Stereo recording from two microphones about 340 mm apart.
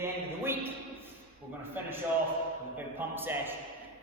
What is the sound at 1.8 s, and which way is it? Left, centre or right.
A man's voice, centre.